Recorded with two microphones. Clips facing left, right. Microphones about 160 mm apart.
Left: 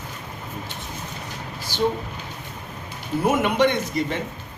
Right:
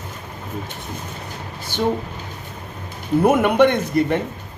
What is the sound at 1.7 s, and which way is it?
Speech, 55° right (ahead or behind).